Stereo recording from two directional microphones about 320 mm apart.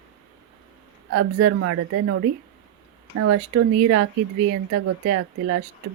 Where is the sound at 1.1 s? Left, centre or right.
Right.